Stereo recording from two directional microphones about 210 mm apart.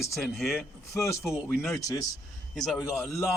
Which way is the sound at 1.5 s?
Centre (ahead or behind).